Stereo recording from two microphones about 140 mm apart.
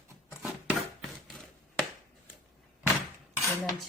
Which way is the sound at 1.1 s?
Centre (ahead or behind).